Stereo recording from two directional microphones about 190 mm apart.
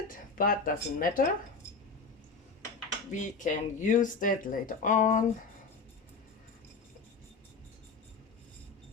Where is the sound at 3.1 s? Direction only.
40° left (ahead or behind).